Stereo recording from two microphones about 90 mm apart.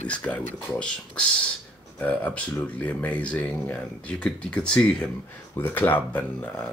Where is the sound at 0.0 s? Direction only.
15° left (ahead or behind).